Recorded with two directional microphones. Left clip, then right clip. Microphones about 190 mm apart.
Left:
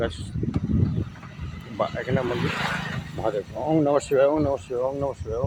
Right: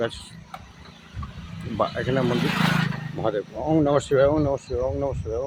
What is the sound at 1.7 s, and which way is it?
Speech, 10° right (ahead or behind).